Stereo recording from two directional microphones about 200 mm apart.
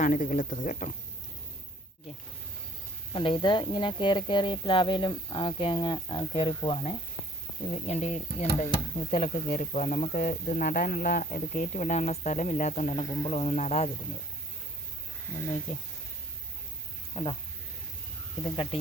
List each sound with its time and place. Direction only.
0.0 s speech: 40° left (ahead or behind)
3.1 s speech: 25° left (ahead or behind)
15.3 s speech: 15° left (ahead or behind)
17.2 s speech: 25° left (ahead or behind)
18.5 s speech: 25° left (ahead or behind)